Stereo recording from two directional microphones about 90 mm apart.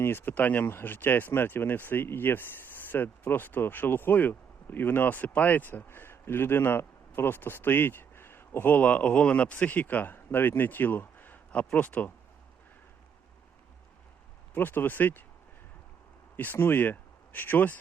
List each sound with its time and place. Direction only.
0.0 s speech: 25° left (ahead or behind)
14.5 s speech: 20° left (ahead or behind)
16.4 s speech: 20° left (ahead or behind)